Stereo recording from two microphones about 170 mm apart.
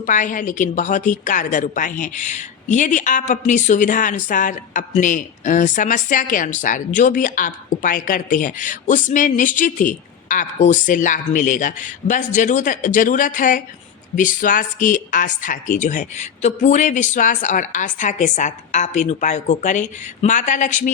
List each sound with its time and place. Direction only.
0.0 s a woman's voice: 50° left (ahead or behind)